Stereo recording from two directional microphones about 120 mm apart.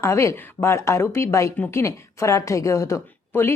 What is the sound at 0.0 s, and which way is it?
A woman's voice, 25° left (ahead or behind).